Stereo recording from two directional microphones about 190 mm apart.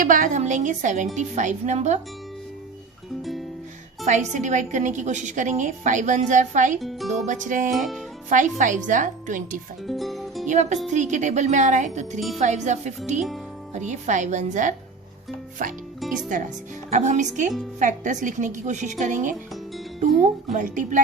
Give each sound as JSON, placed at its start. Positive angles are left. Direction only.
{"t": 0.0, "sound": "a woman's voice", "side_deg": -45}
{"t": 4.0, "sound": "a woman's voice", "side_deg": -40}
{"t": 6.7, "sound": "speech", "side_deg": 0}
{"t": 7.3, "sound": "a woman's voice", "side_deg": -40}
{"t": 9.8, "sound": "speech", "side_deg": 0}
{"t": 10.4, "sound": "a woman's voice", "side_deg": -40}